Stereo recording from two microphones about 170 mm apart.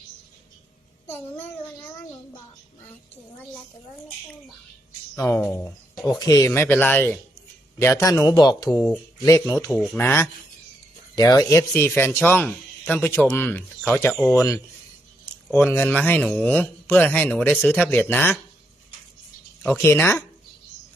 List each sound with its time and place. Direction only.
1.0 s a man's voice: 10° left (ahead or behind)
5.1 s a man's voice: 15° left (ahead or behind)
6.1 s a man's voice: 20° left (ahead or behind)
8.7 s speech: 5° left (ahead or behind)
9.1 s speech: 20° left (ahead or behind)
9.7 s a man's voice: 5° left (ahead or behind)
15.5 s a man's voice: 10° left (ahead or behind)
19.6 s a man's voice: 15° left (ahead or behind)